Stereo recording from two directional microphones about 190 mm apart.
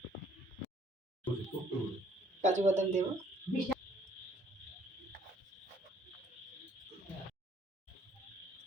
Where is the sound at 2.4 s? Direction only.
40° right (ahead or behind).